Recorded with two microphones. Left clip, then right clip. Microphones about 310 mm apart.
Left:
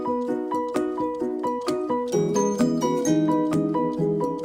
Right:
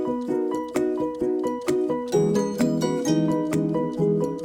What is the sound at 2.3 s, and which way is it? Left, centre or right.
Music, centre.